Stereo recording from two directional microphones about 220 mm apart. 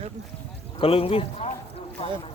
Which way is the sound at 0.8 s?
25° left (ahead or behind).